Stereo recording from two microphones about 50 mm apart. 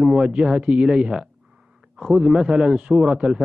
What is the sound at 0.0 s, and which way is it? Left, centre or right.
A man's voice, centre.